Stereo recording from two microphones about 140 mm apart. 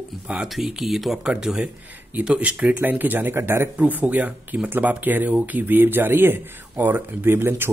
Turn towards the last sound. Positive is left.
turn(degrees=-15)  # may be behind; listen again after turning